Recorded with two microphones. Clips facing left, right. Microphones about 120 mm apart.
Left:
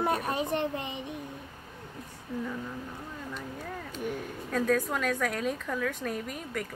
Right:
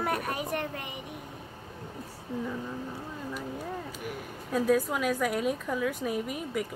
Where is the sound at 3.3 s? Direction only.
5° right (ahead or behind).